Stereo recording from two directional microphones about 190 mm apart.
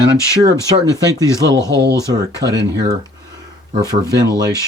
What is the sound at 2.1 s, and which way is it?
Speech, 20° right (ahead or behind).